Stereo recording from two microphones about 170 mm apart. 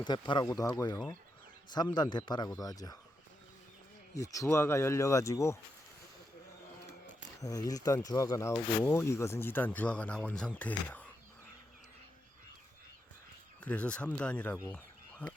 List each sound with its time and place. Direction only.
0.0 s speech: 25° left (ahead or behind)
4.2 s speech: 20° left (ahead or behind)
7.4 s speech: 20° left (ahead or behind)
13.6 s speech: 10° left (ahead or behind)
15.2 s a sound: 10° left (ahead or behind)